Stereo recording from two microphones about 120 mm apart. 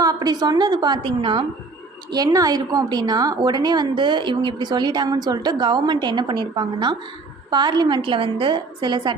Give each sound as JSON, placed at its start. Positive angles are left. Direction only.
{"t": 0.0, "sound": "a woman's voice", "side_deg": -30}
{"t": 2.0, "sound": "a woman's voice", "side_deg": -35}